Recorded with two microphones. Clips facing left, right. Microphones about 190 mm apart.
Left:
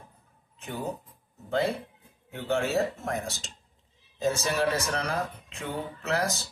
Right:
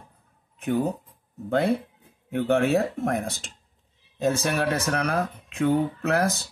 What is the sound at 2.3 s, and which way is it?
Speech, 55° right (ahead or behind).